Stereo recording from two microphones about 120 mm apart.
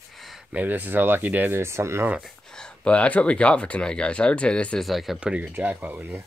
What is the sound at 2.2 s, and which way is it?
Speech, 5° left (ahead or behind).